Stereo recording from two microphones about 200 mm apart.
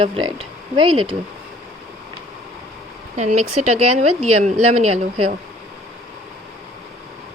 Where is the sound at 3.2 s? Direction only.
35° right (ahead or behind).